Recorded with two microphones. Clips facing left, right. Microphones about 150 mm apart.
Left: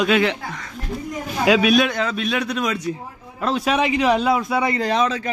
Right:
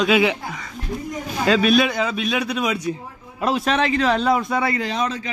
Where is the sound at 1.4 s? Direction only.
5° left (ahead or behind).